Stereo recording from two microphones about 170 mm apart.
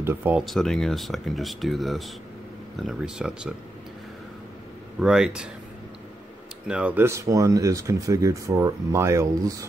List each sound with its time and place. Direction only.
0.0 s speech: 10° right (ahead or behind)
0.5 s speech: centre (ahead or behind)
5.0 s speech: 5° right (ahead or behind)
6.7 s speech: 10° right (ahead or behind)